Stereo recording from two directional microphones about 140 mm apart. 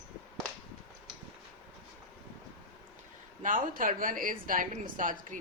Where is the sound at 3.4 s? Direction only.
75° right (ahead or behind).